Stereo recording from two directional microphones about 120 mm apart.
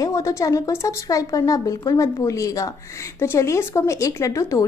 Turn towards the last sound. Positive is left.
turn(degrees=25)  # may be behind; listen again after turning